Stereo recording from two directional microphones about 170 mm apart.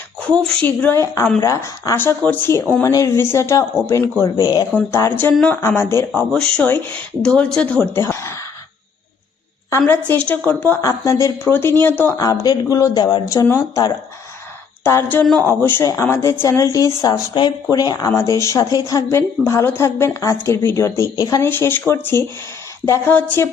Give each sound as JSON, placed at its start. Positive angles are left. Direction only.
{"t": 0.3, "sound": "speech", "side_deg": 5}
{"t": 9.6, "sound": "speech", "side_deg": 15}